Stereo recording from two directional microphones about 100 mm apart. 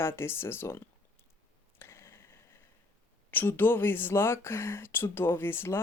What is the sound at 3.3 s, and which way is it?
Speech, 20° left (ahead or behind).